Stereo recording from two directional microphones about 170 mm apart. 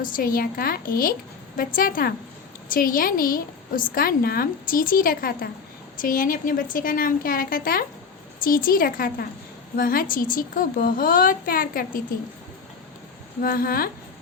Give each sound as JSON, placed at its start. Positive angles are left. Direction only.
{"t": 0.0, "sound": "a woman's voice", "side_deg": 60}
{"t": 13.4, "sound": "a woman's voice", "side_deg": 55}